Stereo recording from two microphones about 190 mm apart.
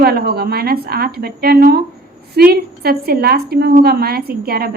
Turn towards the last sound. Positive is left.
turn(degrees=-55)  # may be behind; listen again after turning